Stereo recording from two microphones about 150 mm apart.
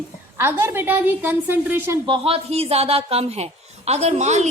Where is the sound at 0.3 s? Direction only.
15° right (ahead or behind).